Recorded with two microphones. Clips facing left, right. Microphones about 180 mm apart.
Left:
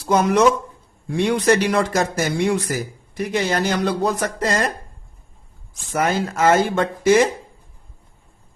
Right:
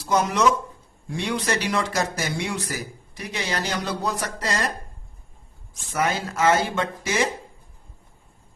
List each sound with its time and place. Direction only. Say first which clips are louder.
0.0 s speech: left 5 dB; 55° left (ahead or behind)
5.9 s speech: left 4 dB; 50° left (ahead or behind)